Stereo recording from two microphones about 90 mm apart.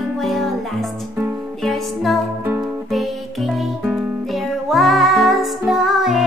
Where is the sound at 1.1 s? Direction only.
25° right (ahead or behind).